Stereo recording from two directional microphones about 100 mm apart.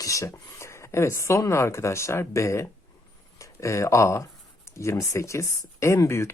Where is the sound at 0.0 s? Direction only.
30° left (ahead or behind).